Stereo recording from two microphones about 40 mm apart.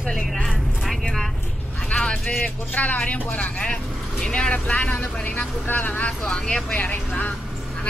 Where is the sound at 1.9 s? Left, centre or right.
Left.